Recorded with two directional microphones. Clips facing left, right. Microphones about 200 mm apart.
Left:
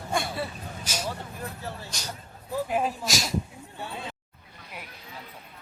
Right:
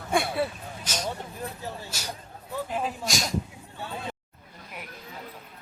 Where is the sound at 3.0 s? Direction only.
Centre (ahead or behind).